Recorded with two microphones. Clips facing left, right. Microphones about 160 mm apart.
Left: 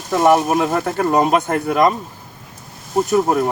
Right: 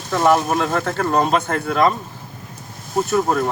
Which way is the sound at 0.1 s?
15° left (ahead or behind).